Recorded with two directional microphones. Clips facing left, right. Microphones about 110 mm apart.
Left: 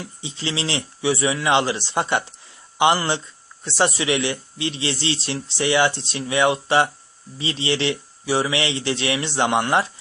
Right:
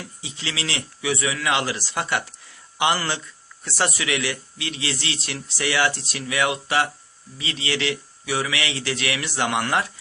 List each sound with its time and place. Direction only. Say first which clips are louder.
0.0 s a man's voice: left 4 dB; 25° left (ahead or behind)